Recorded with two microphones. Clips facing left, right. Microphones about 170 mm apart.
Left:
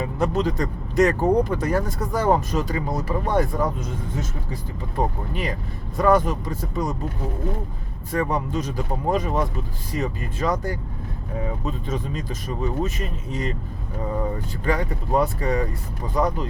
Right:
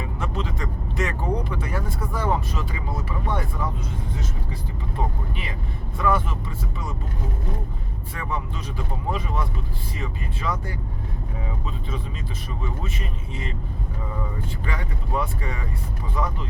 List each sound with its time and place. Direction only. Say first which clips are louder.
0.0 s speech: left 8 dB; 40° left (ahead or behind)
5.0 s speech: left 6 dB; 40° left (ahead or behind)
8.1 s speech: left 8 dB; 40° left (ahead or behind)
14.6 s speech: left 8 dB; 40° left (ahead or behind)